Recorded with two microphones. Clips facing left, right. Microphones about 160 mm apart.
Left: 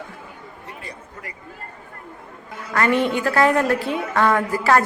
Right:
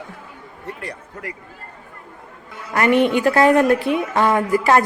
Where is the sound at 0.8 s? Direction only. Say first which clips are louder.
Right 5 dB; 75° right (ahead or behind).